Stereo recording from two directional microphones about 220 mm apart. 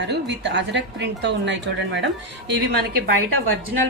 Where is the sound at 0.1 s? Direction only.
50° right (ahead or behind).